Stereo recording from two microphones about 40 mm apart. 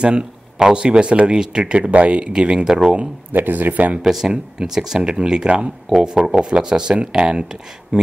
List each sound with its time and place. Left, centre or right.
0.0 s speech: right
2.3 s speech: right
3.3 s speech: right
4.0 s speech: centre; by 8.1 s right